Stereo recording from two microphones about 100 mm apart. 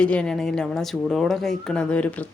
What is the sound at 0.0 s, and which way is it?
Speech, 10° left (ahead or behind).